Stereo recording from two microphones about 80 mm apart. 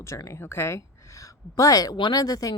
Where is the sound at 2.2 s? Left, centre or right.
Left.